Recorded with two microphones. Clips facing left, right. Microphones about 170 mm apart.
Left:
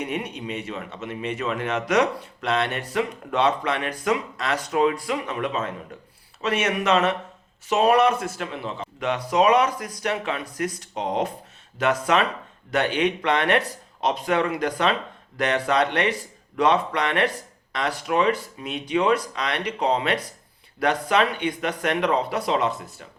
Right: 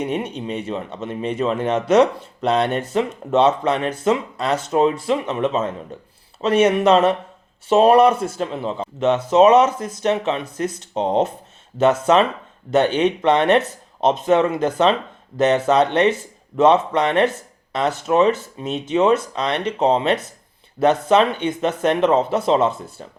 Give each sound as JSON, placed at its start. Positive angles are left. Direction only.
{"t": 0.0, "sound": "speech", "side_deg": -30}